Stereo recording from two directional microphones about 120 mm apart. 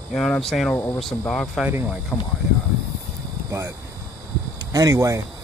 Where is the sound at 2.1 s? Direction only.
20° left (ahead or behind).